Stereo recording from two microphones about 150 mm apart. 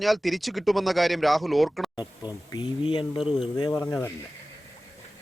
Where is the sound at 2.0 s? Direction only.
25° left (ahead or behind).